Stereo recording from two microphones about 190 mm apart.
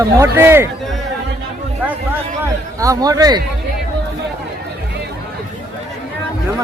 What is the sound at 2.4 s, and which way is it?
A man's voice, 15° right (ahead or behind).